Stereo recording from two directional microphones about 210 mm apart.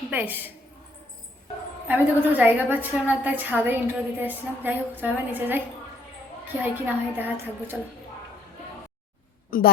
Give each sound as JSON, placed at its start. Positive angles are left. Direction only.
{"t": 0.1, "sound": "a woman's voice", "side_deg": -10}
{"t": 1.9, "sound": "a woman's voice", "side_deg": -10}
{"t": 9.5, "sound": "a woman's voice", "side_deg": 45}